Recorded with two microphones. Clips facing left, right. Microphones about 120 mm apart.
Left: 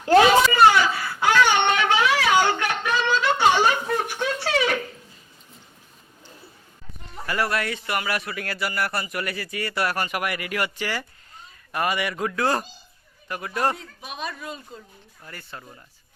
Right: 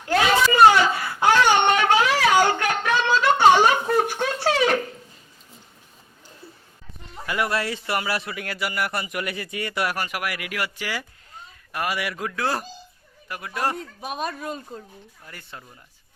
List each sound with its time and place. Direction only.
0.5 s a sound: 25° right (ahead or behind)
1.5 s a sound: 45° right (ahead or behind)
7.3 s speech: 15° right (ahead or behind)
7.5 s a man's voice: 30° right (ahead or behind)
8.4 s speech: 10° right (ahead or behind)
13.7 s speech: 45° right (ahead or behind)
15.3 s speech: 15° right (ahead or behind)